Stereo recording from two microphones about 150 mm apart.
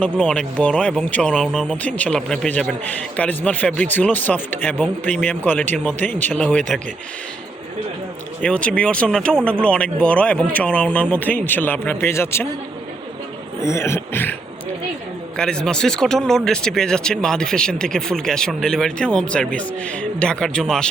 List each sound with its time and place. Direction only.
0.0 s speech: 5° left (ahead or behind)
8.4 s speech: 5° left (ahead or behind)
13.6 s speech: 20° left (ahead or behind)
15.4 s speech: 5° left (ahead or behind)